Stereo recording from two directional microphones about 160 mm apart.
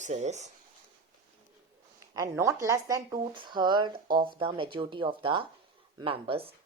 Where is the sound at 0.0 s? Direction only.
45° right (ahead or behind).